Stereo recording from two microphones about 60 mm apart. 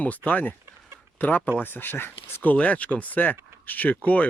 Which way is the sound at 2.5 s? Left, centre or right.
Left.